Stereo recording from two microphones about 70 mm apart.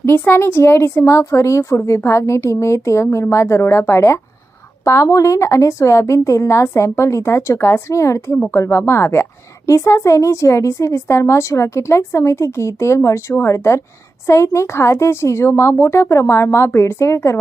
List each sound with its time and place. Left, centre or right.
0.0 s a woman's voice: left